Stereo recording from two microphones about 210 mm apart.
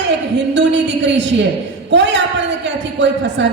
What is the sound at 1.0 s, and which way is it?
A woman's voice, 60° right (ahead or behind).